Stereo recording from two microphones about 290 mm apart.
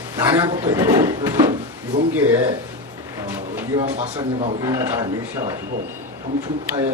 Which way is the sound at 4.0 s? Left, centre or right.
Centre.